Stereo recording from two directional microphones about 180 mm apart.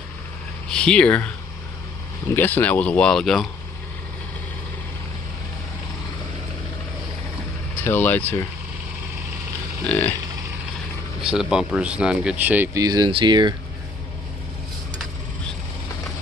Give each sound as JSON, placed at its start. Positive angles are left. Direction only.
{"t": 0.7, "sound": "speech", "side_deg": 5}
{"t": 2.3, "sound": "speech", "side_deg": 10}
{"t": 7.8, "sound": "speech", "side_deg": 10}
{"t": 9.8, "sound": "speech", "side_deg": 10}
{"t": 11.5, "sound": "speech", "side_deg": -5}
{"t": 12.8, "sound": "speech", "side_deg": -25}